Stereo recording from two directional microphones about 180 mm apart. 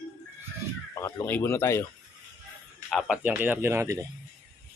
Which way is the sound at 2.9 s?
5° right (ahead or behind).